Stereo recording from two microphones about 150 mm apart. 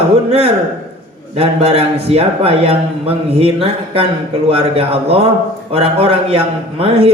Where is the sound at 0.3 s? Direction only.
45° right (ahead or behind).